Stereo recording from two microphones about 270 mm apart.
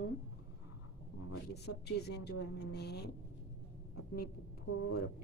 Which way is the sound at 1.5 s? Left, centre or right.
Left.